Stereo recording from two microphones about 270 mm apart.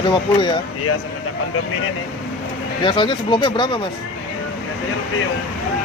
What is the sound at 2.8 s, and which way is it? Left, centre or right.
Speech, centre.